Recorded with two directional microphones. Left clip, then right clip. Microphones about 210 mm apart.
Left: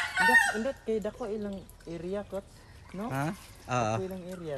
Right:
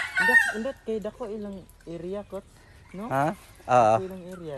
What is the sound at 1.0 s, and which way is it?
Speech, 30° right (ahead or behind).